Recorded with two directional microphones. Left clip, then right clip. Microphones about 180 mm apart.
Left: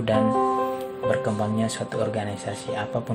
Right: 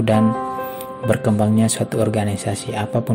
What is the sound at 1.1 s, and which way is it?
Speech, 35° right (ahead or behind).